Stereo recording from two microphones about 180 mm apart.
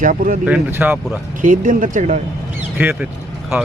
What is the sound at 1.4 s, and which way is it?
Speech, 45° right (ahead or behind).